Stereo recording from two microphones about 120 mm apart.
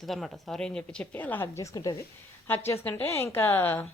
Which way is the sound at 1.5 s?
25° left (ahead or behind).